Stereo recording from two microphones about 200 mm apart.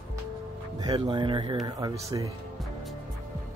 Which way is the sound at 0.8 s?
20° right (ahead or behind).